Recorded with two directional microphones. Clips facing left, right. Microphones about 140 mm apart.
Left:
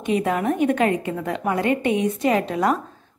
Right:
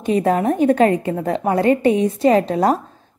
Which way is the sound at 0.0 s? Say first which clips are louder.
Right 4 dB; 35° right (ahead or behind).